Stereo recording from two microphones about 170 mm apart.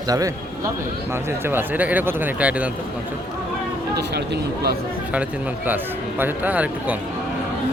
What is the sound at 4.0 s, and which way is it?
Speech, 75° right (ahead or behind).